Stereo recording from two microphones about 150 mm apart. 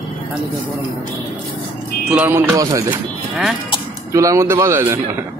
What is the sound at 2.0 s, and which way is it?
Speech, 5° right (ahead or behind).